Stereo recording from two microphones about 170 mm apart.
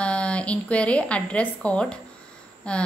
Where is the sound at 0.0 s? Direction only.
5° left (ahead or behind).